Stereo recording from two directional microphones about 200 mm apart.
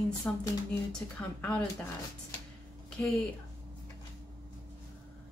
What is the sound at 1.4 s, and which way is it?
Speech, 10° left (ahead or behind).